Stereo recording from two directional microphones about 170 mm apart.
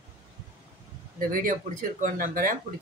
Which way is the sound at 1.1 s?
55° right (ahead or behind).